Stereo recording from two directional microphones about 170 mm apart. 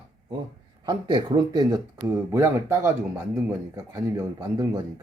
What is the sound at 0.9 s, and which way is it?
A man's voice, 25° right (ahead or behind).